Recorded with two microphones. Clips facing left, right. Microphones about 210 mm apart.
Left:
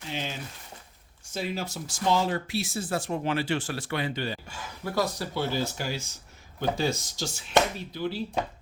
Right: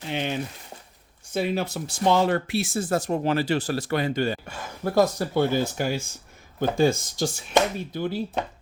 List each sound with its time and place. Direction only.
0.1 s speech: 60° right (ahead or behind)